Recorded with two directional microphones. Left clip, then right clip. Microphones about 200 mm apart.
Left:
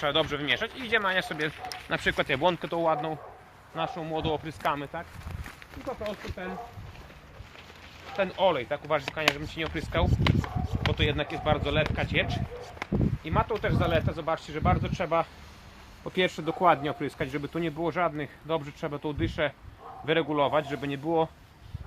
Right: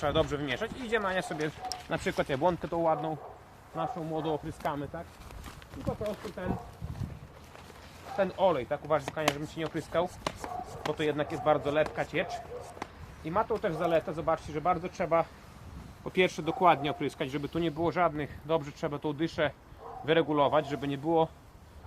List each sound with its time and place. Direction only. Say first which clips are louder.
0.0 s speech: left 2 dB; centre (ahead or behind)
3.8 s speech: left 2 dB; 15° right (ahead or behind)
6.2 s speech: even; 15° left (ahead or behind)
8.1 s speech: left 2 dB; 15° left (ahead or behind)
9.2 s speech: left 4 dB; centre (ahead or behind)
9.7 s speech: even; 15° left (ahead or behind)
10.2 s speech: left 5 dB; centre (ahead or behind)
10.9 s speech: left 1 dB; 20° left (ahead or behind)
12.8 s speech: left 9 dB; 15° left (ahead or behind)
16.0 s speech: even; 30° left (ahead or behind); by 21.2 s 15° left (ahead or behind)